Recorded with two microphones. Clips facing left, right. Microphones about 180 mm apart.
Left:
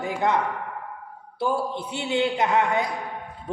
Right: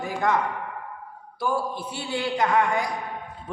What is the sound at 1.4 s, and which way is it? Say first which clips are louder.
A man's voice: left 1 dB; 20° left (ahead or behind).